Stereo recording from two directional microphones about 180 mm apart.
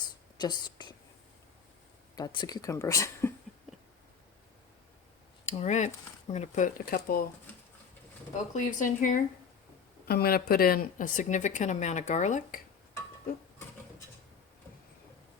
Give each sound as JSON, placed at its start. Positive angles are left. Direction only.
{"t": 0.3, "sound": "a woman's voice", "side_deg": 25}
{"t": 2.1, "sound": "speech", "side_deg": 25}
{"t": 5.5, "sound": "a woman's voice", "side_deg": 40}
{"t": 8.5, "sound": "a woman's voice", "side_deg": 45}
{"t": 10.1, "sound": "a woman's voice", "side_deg": 60}